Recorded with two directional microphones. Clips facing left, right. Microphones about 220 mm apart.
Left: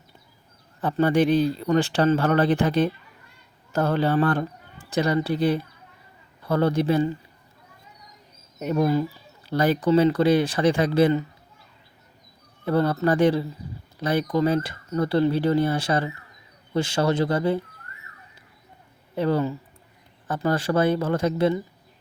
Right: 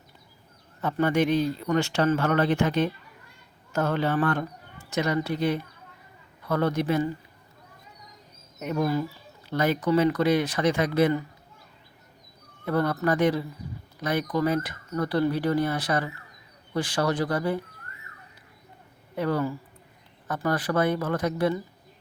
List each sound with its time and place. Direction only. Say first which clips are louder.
0.8 s speech: left 3 dB; 30° left (ahead or behind)
8.6 s speech: left 4 dB; 30° left (ahead or behind)
12.6 s speech: left 3 dB; 30° left (ahead or behind)
19.1 s speech: left 3 dB; 30° left (ahead or behind)